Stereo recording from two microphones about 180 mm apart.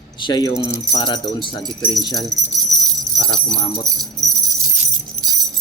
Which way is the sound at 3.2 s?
25° left (ahead or behind).